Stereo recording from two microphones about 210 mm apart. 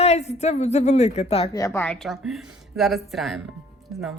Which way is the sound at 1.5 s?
15° left (ahead or behind).